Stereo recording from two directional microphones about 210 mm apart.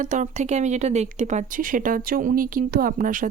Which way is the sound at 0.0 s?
35° right (ahead or behind).